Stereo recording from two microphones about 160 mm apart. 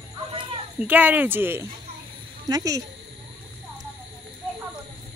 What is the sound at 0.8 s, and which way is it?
Speech, 10° right (ahead or behind).